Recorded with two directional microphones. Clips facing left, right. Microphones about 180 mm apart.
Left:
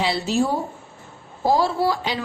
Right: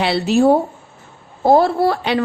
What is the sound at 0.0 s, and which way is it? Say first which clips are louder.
A woman's voice: right 7 dB; 65° right (ahead or behind).